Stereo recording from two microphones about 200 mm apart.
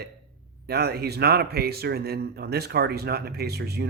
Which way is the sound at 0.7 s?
50° right (ahead or behind).